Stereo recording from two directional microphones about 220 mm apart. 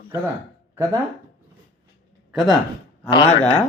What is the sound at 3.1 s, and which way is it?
Speech, 20° left (ahead or behind).